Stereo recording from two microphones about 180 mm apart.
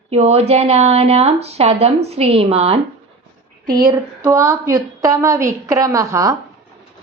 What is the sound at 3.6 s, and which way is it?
A woman's voice, 20° right (ahead or behind).